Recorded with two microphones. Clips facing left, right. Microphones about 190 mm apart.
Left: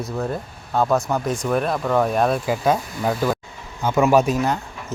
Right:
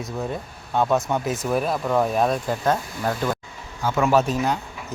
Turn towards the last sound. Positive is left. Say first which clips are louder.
# left 3 dB
turn(degrees=10)  # may be behind; listen again after turning